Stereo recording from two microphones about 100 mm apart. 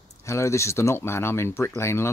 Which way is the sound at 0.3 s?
30° left (ahead or behind).